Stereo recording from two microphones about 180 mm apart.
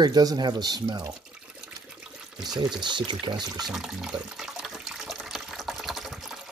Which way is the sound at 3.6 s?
Centre (ahead or behind).